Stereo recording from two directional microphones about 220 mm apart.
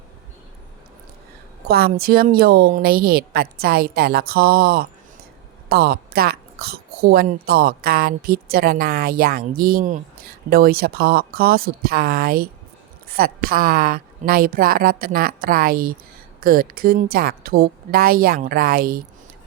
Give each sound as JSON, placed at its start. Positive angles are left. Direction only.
{"t": 1.6, "sound": "a woman's voice", "side_deg": -45}